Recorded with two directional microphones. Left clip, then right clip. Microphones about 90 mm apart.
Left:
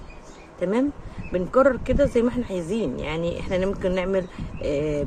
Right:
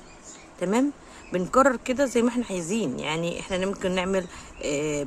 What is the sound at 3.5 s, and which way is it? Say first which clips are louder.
Speech: left 4 dB; 30° right (ahead or behind).